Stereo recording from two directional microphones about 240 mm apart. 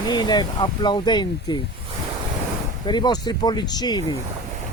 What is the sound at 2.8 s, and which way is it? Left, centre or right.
Speech, centre.